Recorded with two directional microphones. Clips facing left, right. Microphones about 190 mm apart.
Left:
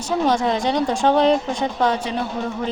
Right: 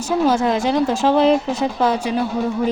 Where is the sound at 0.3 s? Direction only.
5° right (ahead or behind).